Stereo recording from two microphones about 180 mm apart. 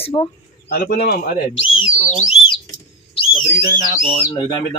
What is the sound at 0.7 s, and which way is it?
Speech, 55° left (ahead or behind).